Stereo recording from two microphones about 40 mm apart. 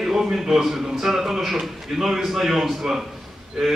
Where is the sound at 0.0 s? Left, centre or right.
Centre.